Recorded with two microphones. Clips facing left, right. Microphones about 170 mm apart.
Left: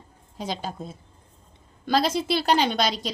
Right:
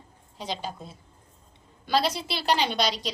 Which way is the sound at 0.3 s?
45° left (ahead or behind).